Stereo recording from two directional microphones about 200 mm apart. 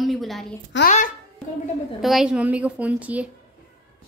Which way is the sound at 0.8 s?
40° left (ahead or behind).